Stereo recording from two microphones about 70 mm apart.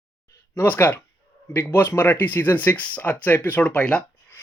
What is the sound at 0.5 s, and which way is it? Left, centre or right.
Speech, left.